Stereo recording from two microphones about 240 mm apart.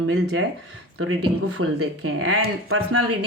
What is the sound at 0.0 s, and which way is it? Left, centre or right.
Speech, right.